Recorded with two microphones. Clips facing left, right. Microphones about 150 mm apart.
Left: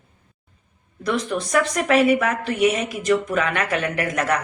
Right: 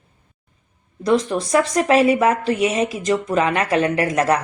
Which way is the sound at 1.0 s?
35° right (ahead or behind).